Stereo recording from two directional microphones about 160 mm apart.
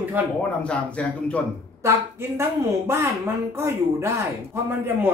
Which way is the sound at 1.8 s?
15° right (ahead or behind).